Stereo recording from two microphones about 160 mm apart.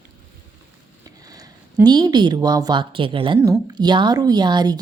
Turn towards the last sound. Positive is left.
turn(degrees=-25)  # may be behind; listen again after turning